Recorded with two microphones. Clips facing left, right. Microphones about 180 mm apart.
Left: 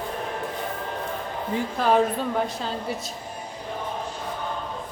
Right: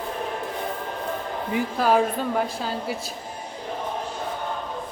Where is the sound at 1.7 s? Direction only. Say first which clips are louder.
Even; 5° right (ahead or behind).